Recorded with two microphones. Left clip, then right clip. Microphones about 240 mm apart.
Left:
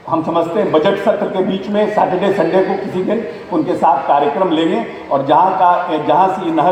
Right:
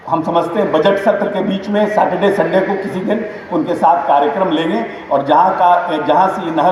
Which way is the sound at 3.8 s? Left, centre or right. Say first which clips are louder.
Right 1 dB; right.